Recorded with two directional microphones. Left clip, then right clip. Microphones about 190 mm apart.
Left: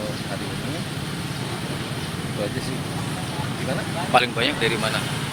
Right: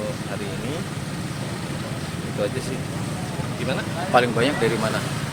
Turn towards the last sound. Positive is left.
turn(degrees=-30)  # may be behind; listen again after turning